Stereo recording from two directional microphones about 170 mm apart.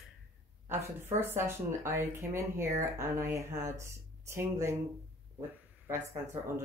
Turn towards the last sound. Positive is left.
turn(degrees=-15)  # may be behind; listen again after turning